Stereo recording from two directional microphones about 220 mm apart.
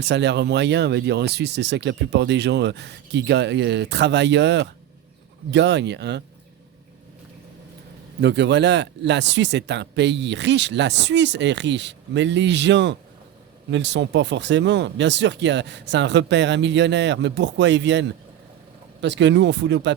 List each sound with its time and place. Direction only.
0.0 s speech: 50° right (ahead or behind)
8.2 s speech: 50° right (ahead or behind)
19.0 s speech: 55° right (ahead or behind)